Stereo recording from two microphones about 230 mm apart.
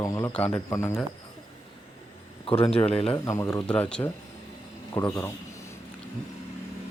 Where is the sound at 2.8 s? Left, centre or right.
Left.